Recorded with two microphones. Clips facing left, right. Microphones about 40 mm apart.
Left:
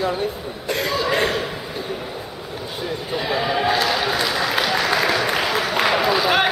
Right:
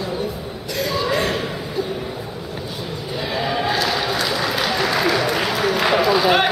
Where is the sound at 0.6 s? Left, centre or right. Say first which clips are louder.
Left 1 dB; left.